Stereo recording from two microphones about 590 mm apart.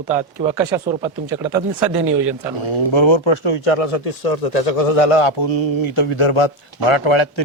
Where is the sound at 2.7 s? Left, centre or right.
Left.